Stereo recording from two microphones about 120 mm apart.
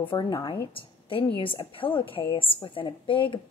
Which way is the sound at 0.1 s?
35° left (ahead or behind).